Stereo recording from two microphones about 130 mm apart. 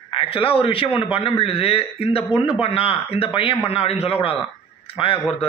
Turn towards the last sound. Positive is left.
turn(degrees=45)  # may be behind; listen again after turning